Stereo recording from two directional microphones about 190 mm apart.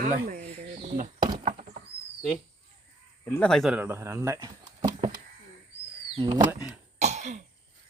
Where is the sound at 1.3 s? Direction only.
45° right (ahead or behind).